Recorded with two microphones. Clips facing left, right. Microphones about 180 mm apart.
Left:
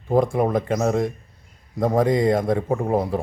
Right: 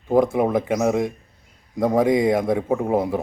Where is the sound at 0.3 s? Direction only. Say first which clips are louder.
Right 1 dB; 5° right (ahead or behind).